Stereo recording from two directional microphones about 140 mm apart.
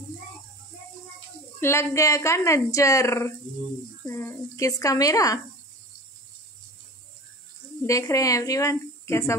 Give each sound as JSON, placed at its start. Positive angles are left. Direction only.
{"t": 1.6, "sound": "speech", "side_deg": 20}
{"t": 7.8, "sound": "speech", "side_deg": 20}